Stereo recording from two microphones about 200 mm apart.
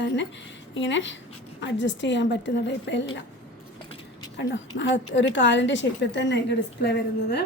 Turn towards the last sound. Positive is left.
turn(degrees=55)  # may be behind; listen again after turning